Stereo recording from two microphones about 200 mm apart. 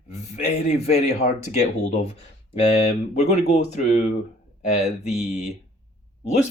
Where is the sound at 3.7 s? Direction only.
35° left (ahead or behind).